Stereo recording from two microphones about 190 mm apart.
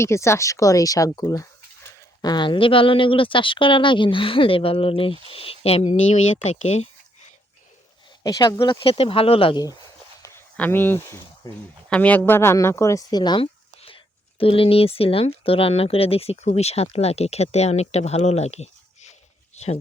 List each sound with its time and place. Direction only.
0.0 s speech: 15° left (ahead or behind); by 6.8 s 35° left (ahead or behind)
8.2 s speech: 20° left (ahead or behind)
10.2 s speech: 15° left (ahead or behind)
11.4 s speech: 20° left (ahead or behind)
11.9 s speech: 5° left (ahead or behind); by 19.8 s 35° left (ahead or behind)